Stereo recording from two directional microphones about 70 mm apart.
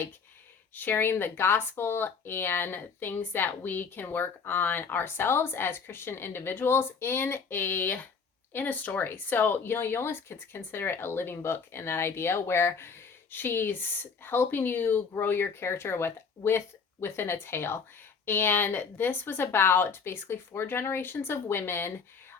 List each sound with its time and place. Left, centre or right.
0.7 s speech: left